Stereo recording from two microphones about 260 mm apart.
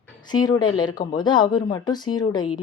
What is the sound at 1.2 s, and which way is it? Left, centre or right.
Speech, centre.